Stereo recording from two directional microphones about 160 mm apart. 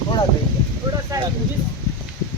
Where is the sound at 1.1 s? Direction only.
20° right (ahead or behind).